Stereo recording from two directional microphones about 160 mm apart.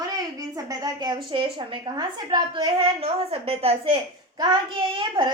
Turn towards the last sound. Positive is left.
turn(degrees=-30)  # may be behind; listen again after turning